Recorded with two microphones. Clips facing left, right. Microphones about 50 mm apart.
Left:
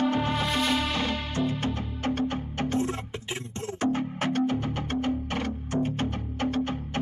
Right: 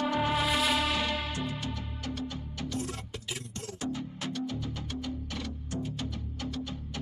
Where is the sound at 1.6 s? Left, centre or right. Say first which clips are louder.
Left 8 dB; left.